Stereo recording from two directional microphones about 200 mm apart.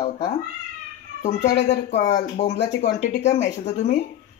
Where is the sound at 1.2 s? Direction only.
35° left (ahead or behind).